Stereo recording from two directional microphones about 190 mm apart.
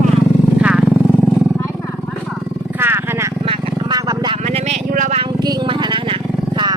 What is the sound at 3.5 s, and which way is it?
Vehicle, 20° right (ahead or behind).